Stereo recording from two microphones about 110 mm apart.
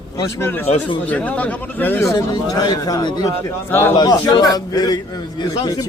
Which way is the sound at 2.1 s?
35° left (ahead or behind).